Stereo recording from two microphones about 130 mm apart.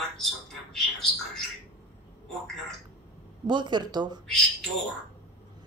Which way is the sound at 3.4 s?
35° right (ahead or behind).